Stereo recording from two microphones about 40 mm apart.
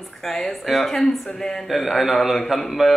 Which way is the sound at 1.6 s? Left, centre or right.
Centre.